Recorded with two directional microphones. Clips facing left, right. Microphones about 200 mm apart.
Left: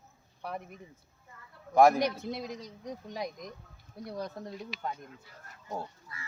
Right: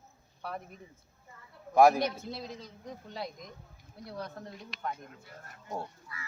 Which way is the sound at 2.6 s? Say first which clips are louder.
Left 4 dB; 15° left (ahead or behind).